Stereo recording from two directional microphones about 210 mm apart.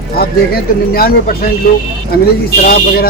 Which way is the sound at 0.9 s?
45° left (ahead or behind).